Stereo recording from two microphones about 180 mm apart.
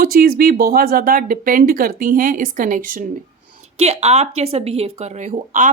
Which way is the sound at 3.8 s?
35° right (ahead or behind).